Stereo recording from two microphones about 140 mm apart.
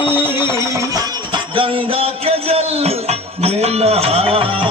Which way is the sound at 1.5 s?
40° right (ahead or behind).